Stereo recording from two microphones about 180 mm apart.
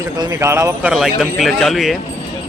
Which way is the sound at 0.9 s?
Centre (ahead or behind).